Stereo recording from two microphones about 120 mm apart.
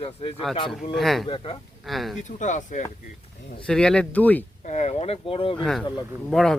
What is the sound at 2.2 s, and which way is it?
Speech, 90° left.